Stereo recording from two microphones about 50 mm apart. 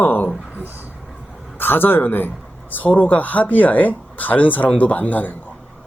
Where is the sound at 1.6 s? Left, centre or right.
Left.